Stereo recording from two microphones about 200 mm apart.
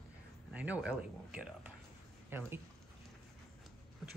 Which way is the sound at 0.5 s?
5° right (ahead or behind).